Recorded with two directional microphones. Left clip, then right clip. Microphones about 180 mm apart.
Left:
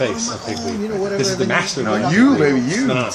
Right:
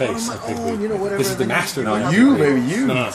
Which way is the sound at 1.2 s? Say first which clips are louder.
Left 3 dB; 10° right (ahead or behind).